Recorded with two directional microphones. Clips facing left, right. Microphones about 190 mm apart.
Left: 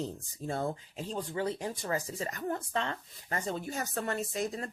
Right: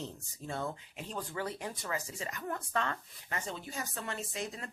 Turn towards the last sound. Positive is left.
turn(degrees=40)  # may be behind; listen again after turning